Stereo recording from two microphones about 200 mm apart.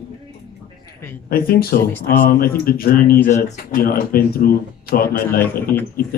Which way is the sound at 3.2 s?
35° left (ahead or behind).